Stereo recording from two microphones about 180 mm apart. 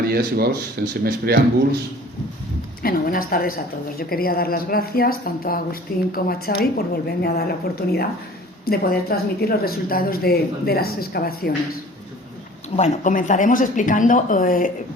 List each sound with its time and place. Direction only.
0.1 s speech: 55° right (ahead or behind)
2.8 s a woman's voice: 55° left (ahead or behind)
12.7 s speech: 40° left (ahead or behind)